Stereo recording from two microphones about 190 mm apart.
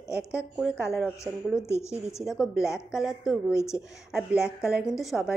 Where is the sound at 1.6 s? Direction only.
15° left (ahead or behind).